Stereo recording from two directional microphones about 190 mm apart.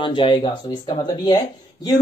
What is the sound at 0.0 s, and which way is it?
A man's voice, 25° left (ahead or behind).